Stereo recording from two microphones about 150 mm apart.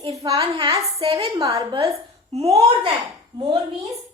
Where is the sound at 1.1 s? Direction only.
20° right (ahead or behind).